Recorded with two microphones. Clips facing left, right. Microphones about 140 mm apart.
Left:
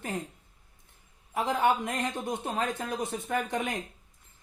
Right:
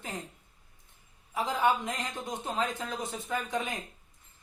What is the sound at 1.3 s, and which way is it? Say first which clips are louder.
Speech: left 2 dB; 60° left (ahead or behind).